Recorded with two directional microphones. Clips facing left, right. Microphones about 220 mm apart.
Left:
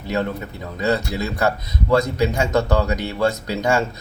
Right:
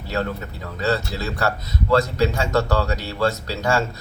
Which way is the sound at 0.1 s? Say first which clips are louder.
Left 2 dB; 15° left (ahead or behind).